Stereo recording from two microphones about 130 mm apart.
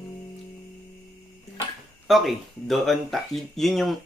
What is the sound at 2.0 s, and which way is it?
Speech, centre (ahead or behind).